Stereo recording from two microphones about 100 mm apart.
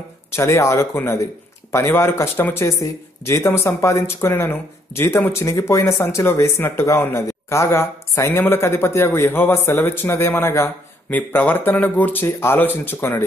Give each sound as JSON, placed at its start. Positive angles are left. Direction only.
{"t": 0.3, "sound": "speech", "side_deg": 25}